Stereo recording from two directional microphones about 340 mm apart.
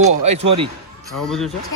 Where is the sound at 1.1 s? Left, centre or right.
Centre.